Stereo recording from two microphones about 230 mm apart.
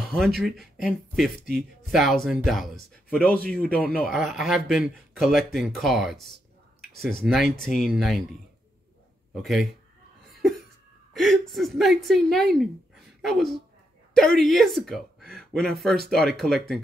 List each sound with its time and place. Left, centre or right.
0.0 s a sound: centre
0.4 s speech: centre
7.2 s speech: centre
9.3 s speech: centre
11.1 s speech: centre